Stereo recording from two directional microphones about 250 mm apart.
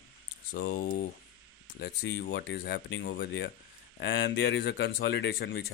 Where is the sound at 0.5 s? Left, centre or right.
Left.